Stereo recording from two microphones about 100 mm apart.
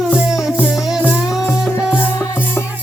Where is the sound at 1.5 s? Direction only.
20° left (ahead or behind).